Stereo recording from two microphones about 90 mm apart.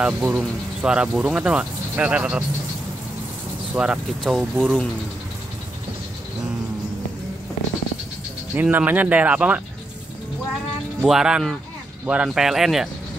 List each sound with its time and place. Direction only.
0.0 s speech: 15° right (ahead or behind)
3.7 s speech: 10° right (ahead or behind)
8.5 s speech: 20° right (ahead or behind)
11.1 s speech: 5° right (ahead or behind)